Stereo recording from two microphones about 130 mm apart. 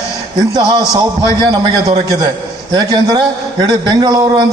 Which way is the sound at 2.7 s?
30° right (ahead or behind).